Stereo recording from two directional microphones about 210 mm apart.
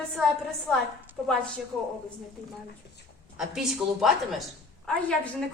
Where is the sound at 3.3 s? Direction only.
Centre (ahead or behind).